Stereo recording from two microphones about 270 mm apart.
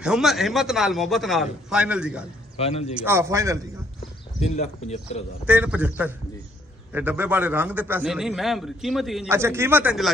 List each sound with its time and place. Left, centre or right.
0.0 s a man's voice: centre
2.5 s a man's voice: left
2.9 s a man's voice: centre
4.6 s speech: left
5.5 s a man's voice: centre